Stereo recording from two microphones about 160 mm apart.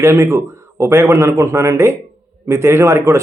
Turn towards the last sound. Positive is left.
turn(degrees=-15)  # may be behind; listen again after turning